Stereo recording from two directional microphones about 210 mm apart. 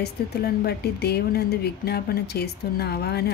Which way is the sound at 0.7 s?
50° left (ahead or behind).